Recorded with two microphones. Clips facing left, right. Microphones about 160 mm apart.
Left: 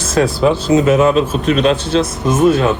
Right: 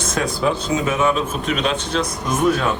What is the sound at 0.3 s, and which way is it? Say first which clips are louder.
Speech: left 8 dB; 30° left (ahead or behind).